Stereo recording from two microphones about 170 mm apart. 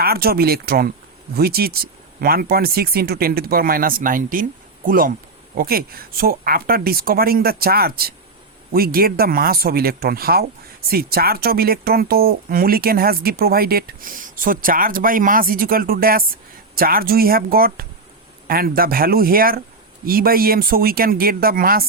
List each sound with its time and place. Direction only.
0.0 s speech: 65° right (ahead or behind)